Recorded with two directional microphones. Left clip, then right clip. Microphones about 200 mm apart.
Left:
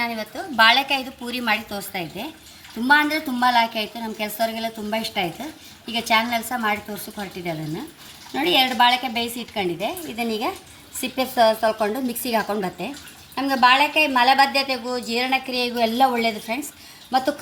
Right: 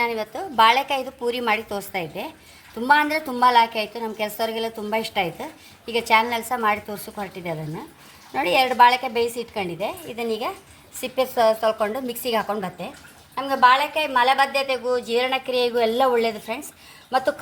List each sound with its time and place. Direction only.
0.0 s a woman's voice: 45° right (ahead or behind)